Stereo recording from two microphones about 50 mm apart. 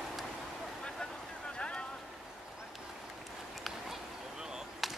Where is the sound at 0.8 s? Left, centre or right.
Centre.